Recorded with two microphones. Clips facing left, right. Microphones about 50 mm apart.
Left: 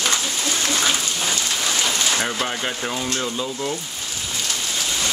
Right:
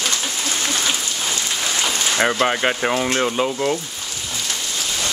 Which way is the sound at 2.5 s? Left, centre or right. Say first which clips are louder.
Right 6 dB; right.